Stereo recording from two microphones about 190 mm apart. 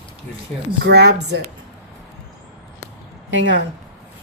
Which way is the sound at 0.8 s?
60° right (ahead or behind).